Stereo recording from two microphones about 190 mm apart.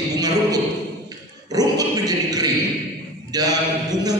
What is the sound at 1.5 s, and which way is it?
Dog, 20° right (ahead or behind).